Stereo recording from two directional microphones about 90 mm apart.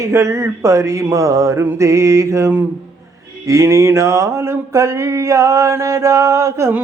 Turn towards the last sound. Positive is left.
turn(degrees=-30)  # may be behind; listen again after turning